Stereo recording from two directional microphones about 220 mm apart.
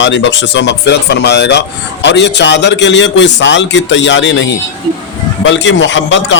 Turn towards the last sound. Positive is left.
turn(degrees=55)  # may be behind; listen again after turning